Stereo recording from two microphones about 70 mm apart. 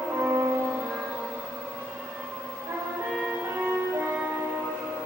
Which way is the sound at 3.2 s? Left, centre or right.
Right.